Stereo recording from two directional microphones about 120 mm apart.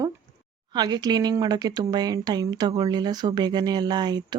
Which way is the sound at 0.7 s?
35° right (ahead or behind).